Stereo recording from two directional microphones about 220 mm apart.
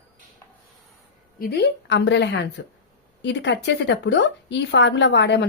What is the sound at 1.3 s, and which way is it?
A woman's voice, 45° left (ahead or behind).